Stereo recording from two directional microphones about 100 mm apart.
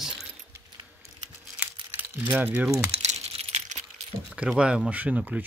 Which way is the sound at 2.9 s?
90° right.